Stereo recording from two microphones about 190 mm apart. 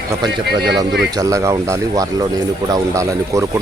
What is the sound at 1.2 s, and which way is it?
Speech, 15° right (ahead or behind).